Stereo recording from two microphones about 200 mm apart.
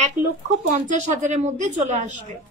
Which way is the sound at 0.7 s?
35° right (ahead or behind).